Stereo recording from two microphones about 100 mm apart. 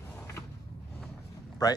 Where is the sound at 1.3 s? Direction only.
40° left (ahead or behind).